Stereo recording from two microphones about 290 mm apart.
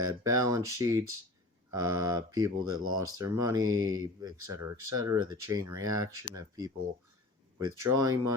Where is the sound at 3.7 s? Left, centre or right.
Right.